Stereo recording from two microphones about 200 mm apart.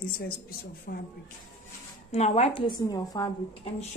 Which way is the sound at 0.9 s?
50° left (ahead or behind).